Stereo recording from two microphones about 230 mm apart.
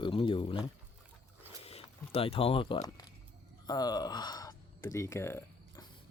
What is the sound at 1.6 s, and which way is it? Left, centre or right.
Speech, left.